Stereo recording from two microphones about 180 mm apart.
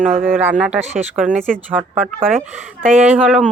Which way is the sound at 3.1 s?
5° right (ahead or behind).